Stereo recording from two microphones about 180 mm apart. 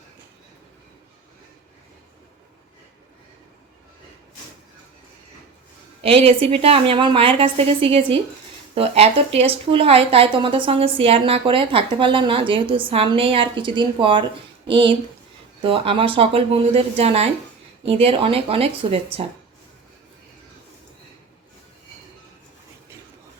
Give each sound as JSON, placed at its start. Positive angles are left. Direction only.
{"t": 6.0, "sound": "a woman's voice", "side_deg": -30}